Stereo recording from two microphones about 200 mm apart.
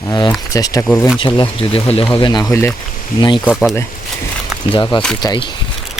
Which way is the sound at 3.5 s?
Centre (ahead or behind).